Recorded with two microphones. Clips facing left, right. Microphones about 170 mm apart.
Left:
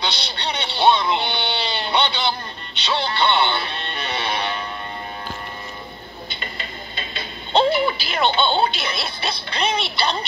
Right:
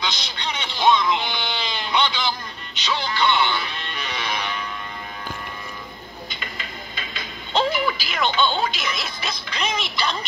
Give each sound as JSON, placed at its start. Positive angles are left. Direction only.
{"t": 0.0, "sound": "speech", "side_deg": 30}
{"t": 6.2, "sound": "music", "side_deg": 30}